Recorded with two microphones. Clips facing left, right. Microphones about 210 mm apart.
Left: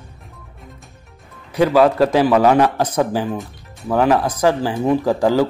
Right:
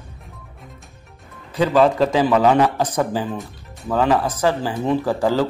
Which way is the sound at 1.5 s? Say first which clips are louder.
Left 2 dB; 10° left (ahead or behind).